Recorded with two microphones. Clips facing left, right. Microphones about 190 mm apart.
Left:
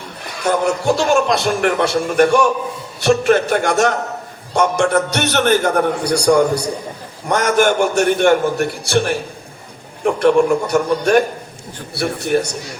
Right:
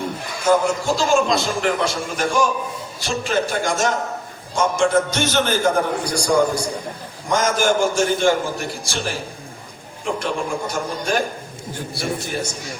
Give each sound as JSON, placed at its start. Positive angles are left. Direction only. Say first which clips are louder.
{"t": 0.4, "sound": "a man's voice", "louder": "left 2 dB", "side_deg": 65}